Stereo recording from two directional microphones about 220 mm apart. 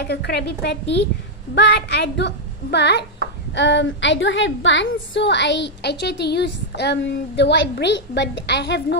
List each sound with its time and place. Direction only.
0.0 s a woman's voice: 50° left (ahead or behind)